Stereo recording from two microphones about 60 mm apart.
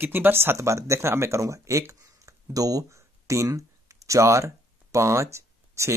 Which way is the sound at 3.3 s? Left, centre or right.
Right.